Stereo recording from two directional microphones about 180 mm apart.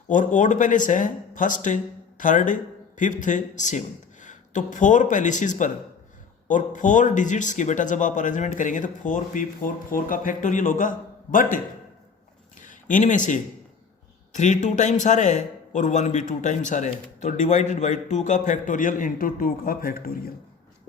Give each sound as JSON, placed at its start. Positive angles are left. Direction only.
{"t": 0.1, "sound": "a man's voice", "side_deg": 45}
{"t": 12.5, "sound": "a sound", "side_deg": 45}
{"t": 14.3, "sound": "a man's voice", "side_deg": 40}